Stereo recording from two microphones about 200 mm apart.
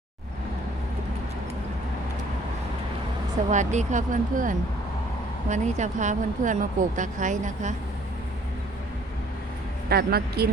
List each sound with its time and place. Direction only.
3.5 s speech: 35° right (ahead or behind)
9.9 s speech: 50° right (ahead or behind)